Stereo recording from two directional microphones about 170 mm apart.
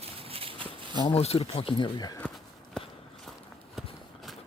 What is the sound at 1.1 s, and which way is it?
Speech, 35° left (ahead or behind).